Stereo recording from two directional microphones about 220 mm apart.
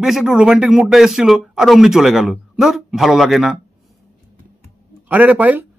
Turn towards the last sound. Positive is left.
turn(degrees=-5)  # may be behind; listen again after turning